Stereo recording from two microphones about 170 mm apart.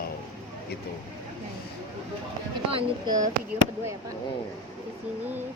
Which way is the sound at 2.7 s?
30° right (ahead or behind).